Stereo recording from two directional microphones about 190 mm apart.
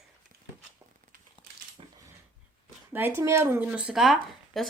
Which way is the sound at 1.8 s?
30° right (ahead or behind).